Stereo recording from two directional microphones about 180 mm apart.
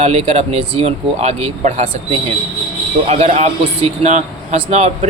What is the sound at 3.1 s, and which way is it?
Speech, 40° right (ahead or behind).